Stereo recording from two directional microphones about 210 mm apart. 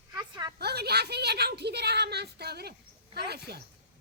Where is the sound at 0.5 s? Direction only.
50° right (ahead or behind).